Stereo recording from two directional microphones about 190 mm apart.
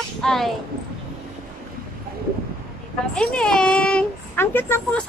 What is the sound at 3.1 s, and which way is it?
Speech, 5° left (ahead or behind).